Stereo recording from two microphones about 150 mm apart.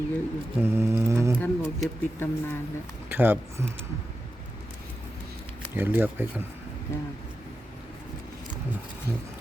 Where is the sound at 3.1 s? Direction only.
15° right (ahead or behind).